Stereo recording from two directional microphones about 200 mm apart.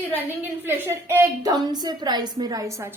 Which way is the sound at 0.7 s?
10° right (ahead or behind).